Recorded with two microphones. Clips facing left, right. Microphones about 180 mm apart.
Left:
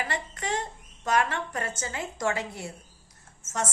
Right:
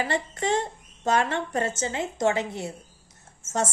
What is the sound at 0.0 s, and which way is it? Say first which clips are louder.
A woman's voice: right 6 dB; 30° right (ahead or behind).